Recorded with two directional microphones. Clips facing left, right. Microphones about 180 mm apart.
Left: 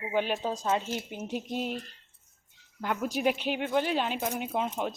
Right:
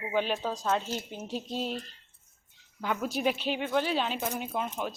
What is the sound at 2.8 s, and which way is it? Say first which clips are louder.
Speech: even; 15° left (ahead or behind).